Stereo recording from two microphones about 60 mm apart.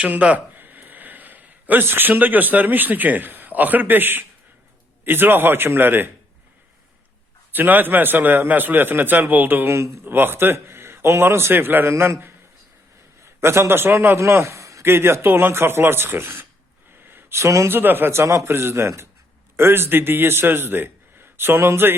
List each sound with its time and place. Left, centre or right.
0.0 s a man's voice: right
7.5 s a man's voice: right
9.6 s speech: right
10.0 s a man's voice: right
13.2 s a man's voice: right
14.2 s a man's voice: right
14.8 s a man's voice: right
17.1 s a sound: right
17.7 s a man's voice: right